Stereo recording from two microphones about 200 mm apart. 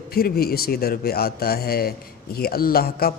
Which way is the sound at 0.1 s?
50° left (ahead or behind).